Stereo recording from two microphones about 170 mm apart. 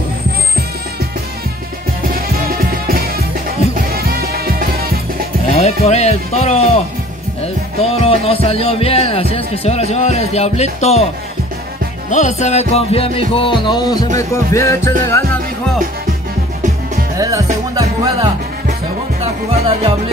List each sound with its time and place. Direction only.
2.9 s music: 60° right (ahead or behind)
5.5 s speech: 40° left (ahead or behind)
7.8 s speech: 35° left (ahead or behind)
12.1 s speech: 45° left (ahead or behind)
13.3 s music: 30° left (ahead or behind)
17.2 s speech: 20° right (ahead or behind)
19.5 s music: 35° right (ahead or behind)